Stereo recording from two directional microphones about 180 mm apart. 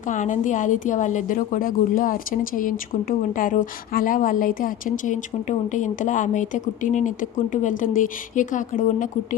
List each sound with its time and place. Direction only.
0.1 s a woman's voice: 45° left (ahead or behind)